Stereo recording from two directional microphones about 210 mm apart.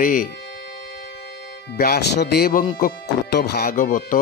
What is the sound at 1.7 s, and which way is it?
A man's voice, 50° left (ahead or behind).